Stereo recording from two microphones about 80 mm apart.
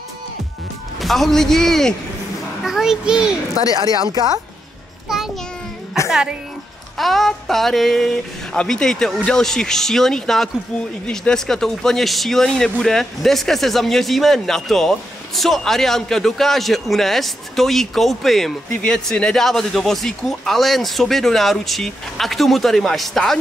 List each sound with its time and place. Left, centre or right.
1.0 s speech: centre
2.6 s a child's voice: centre
3.7 s speech: right
5.0 s a sound: centre
6.0 s a woman's voice: centre